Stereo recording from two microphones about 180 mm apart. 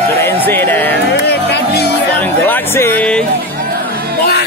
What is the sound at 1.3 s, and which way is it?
Speech, 65° left (ahead or behind).